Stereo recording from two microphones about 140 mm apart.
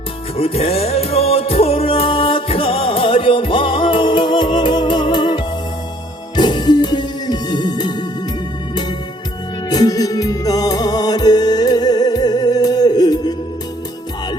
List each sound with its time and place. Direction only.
0.3 s music: 45° left (ahead or behind)
9.6 s music: 25° left (ahead or behind)